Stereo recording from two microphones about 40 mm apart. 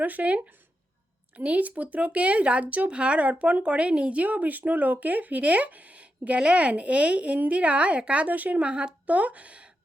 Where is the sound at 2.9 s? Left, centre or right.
Right.